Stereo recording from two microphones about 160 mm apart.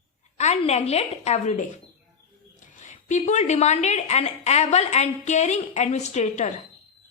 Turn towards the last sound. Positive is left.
turn(degrees=45)  # may be behind; listen again after turning